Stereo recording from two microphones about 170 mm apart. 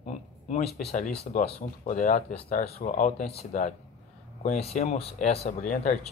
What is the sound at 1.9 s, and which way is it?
Speech, 50° left (ahead or behind).